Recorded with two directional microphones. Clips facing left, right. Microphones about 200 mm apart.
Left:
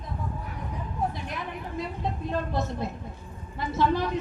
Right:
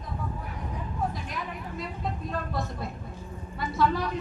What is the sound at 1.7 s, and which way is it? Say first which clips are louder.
Vehicle: left 3 dB; 25° left (ahead or behind).